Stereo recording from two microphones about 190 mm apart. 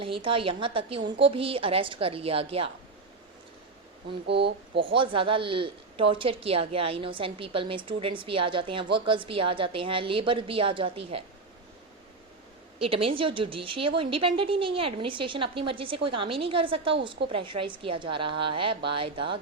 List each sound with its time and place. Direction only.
0.0 s a woman's voice: 30° right (ahead or behind)
4.3 s speech: 65° right (ahead or behind)
4.8 s a woman's voice: 25° right (ahead or behind)
12.8 s a woman's voice: 30° right (ahead or behind)